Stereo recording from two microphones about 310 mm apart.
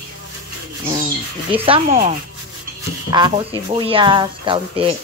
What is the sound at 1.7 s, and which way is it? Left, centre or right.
Speech, centre.